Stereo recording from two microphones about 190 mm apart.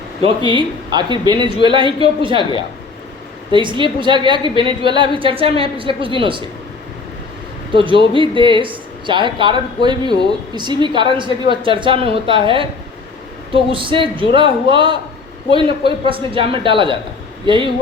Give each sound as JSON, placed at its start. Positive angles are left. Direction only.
{"t": 0.2, "sound": "speech", "side_deg": -25}
{"t": 3.5, "sound": "speech", "side_deg": -25}
{"t": 7.7, "sound": "speech", "side_deg": -25}
{"t": 16.0, "sound": "speech", "side_deg": -25}